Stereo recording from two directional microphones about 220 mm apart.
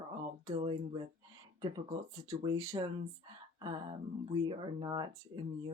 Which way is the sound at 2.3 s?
20° right (ahead or behind).